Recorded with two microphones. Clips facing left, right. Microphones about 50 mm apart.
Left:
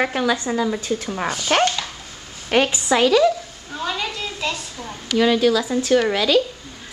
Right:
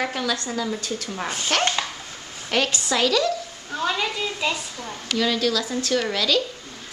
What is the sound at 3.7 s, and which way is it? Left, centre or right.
Speech, centre.